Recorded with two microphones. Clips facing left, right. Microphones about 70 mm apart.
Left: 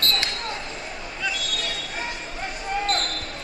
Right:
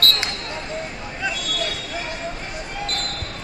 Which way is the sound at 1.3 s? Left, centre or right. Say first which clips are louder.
Right 3 dB; right.